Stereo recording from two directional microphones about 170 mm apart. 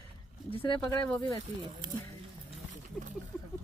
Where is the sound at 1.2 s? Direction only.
20° left (ahead or behind).